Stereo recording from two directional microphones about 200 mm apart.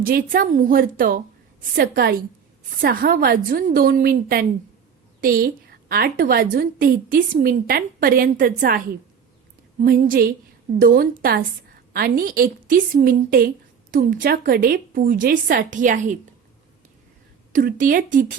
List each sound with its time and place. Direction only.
0.0 s a woman's voice: 45° right (ahead or behind)
9.8 s a woman's voice: 45° right (ahead or behind)
17.5 s speech: 45° right (ahead or behind)